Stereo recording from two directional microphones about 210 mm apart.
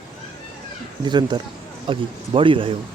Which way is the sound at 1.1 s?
20° right (ahead or behind).